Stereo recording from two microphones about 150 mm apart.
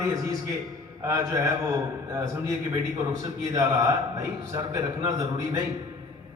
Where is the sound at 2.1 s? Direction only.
20° right (ahead or behind).